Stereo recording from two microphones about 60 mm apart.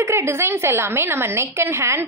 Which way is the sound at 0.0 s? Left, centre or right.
Right.